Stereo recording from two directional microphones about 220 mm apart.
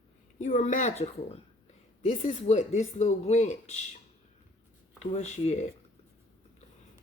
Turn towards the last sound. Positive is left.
turn(degrees=30)  # may be behind; listen again after turning